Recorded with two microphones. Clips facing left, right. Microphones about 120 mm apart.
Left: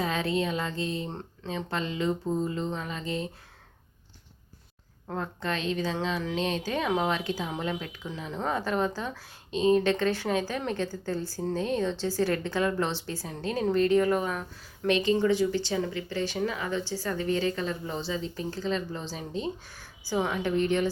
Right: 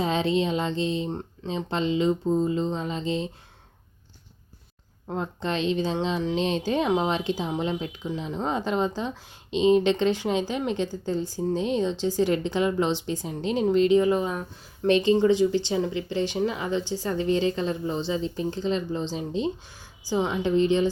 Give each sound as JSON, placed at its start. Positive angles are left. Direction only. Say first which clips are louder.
{"t": 0.0, "sound": "speech", "louder": "right 4 dB", "side_deg": -25}
{"t": 5.0, "sound": "speech", "louder": "right 3 dB", "side_deg": -20}